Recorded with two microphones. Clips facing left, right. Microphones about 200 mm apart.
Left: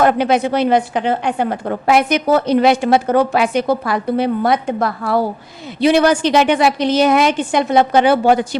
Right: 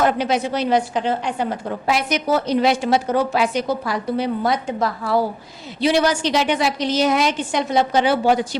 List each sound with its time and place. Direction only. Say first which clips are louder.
0.0 s a woman's voice: left 5 dB; 60° left (ahead or behind)